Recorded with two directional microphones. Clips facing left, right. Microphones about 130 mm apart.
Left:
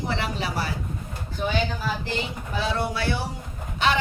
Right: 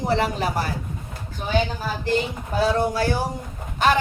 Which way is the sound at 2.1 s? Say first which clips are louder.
Right 6 dB; 45° right (ahead or behind).